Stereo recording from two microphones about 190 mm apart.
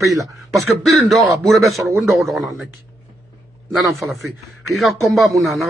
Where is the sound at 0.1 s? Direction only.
15° right (ahead or behind).